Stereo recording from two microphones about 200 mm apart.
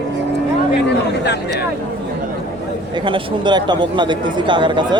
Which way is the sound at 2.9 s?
25° right (ahead or behind).